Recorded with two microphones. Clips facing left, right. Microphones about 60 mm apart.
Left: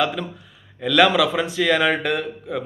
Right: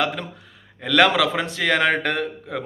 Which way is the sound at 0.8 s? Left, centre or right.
Right.